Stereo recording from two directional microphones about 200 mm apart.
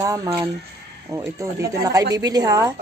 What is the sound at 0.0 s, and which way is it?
A woman's voice, 15° right (ahead or behind).